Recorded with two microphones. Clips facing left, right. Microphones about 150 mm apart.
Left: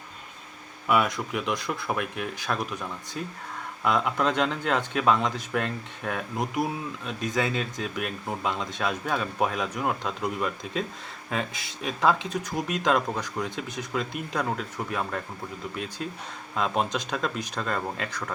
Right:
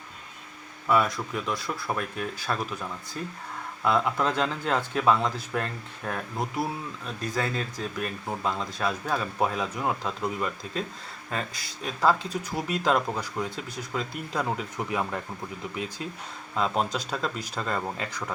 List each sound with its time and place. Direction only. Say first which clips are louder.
0.9 s a man's voice: even; centre (ahead or behind)
12.5 s speech: even; 5° right (ahead or behind)